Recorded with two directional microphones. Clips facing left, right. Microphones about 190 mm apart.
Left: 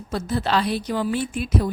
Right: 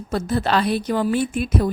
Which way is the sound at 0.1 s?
50° right (ahead or behind).